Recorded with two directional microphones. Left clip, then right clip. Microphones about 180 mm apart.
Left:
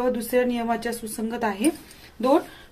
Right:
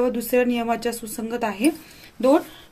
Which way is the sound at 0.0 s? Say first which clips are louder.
Right 2 dB; 30° right (ahead or behind).